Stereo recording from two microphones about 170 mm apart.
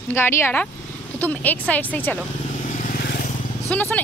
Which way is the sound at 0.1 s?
15° left (ahead or behind).